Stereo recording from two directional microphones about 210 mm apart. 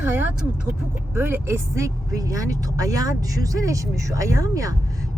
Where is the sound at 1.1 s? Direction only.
10° right (ahead or behind).